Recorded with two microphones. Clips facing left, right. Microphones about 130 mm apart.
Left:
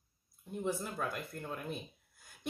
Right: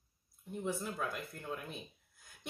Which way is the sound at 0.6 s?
Centre (ahead or behind).